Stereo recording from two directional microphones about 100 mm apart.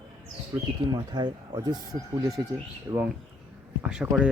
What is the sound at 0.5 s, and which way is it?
Speech, 45° right (ahead or behind).